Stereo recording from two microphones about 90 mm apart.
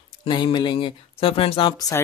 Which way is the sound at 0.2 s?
60° left (ahead or behind).